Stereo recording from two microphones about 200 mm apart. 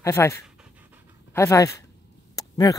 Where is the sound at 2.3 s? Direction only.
20° left (ahead or behind).